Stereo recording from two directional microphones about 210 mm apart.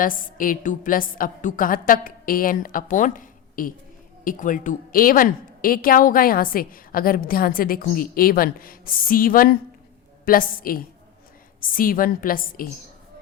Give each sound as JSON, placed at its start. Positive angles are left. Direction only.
{"t": 0.0, "sound": "a woman's voice", "side_deg": 40}